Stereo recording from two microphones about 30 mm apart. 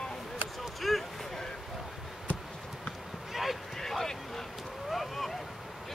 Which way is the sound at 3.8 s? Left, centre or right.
Centre.